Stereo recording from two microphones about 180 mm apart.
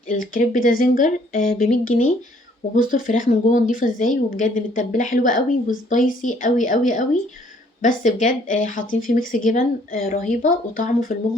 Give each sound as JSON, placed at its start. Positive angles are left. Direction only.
{"t": 0.1, "sound": "speech", "side_deg": 45}